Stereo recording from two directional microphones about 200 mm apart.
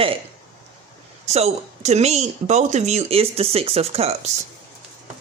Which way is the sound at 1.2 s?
35° right (ahead or behind).